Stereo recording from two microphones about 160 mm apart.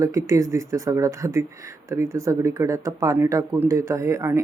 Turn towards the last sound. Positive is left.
turn(degrees=-20)  # may be behind; listen again after turning